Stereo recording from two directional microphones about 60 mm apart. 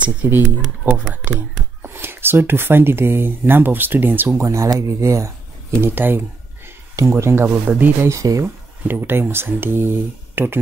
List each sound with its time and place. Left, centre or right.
0.0 s speech: right
4.4 s speech: right
8.0 s speech: right
8.8 s speech: right